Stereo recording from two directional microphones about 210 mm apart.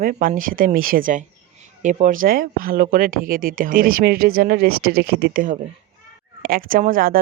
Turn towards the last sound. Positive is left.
turn(degrees=-40)  # may be behind; listen again after turning